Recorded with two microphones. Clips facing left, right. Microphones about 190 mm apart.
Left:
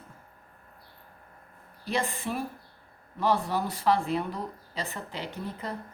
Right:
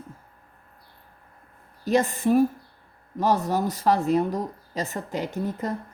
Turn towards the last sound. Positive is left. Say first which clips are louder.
# right 8 dB
turn(degrees=-45)  # may be behind; listen again after turning